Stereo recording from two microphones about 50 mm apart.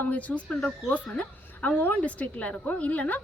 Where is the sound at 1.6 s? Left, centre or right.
Left.